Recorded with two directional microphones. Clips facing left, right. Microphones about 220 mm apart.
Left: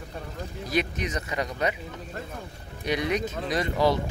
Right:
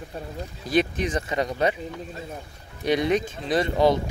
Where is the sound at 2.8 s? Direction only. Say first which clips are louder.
Right 5 dB; 25° right (ahead or behind).